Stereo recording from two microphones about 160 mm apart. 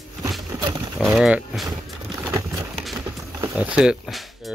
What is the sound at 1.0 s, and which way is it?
Speech, centre (ahead or behind).